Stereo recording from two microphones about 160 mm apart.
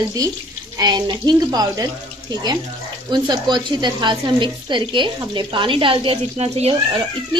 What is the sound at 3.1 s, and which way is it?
A woman's voice, 30° right (ahead or behind).